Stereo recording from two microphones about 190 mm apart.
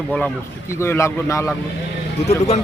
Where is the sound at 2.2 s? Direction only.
35° left (ahead or behind).